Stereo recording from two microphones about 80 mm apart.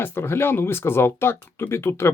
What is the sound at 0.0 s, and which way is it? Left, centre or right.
Speech, left.